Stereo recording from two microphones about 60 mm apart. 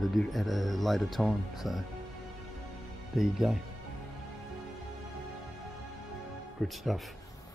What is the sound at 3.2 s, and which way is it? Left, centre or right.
Speech, centre.